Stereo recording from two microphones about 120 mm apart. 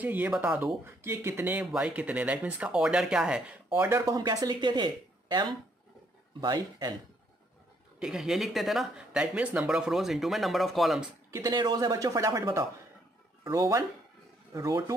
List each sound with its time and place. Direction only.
0.0 s speech: 15° right (ahead or behind)
3.7 s speech: 20° right (ahead or behind)
8.0 s speech: 5° right (ahead or behind)
11.5 s speech: 35° right (ahead or behind)